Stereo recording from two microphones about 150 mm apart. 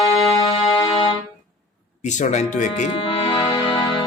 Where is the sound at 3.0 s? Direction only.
35° left (ahead or behind).